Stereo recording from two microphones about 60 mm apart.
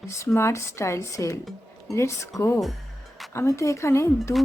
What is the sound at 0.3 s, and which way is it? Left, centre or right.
Speech, left.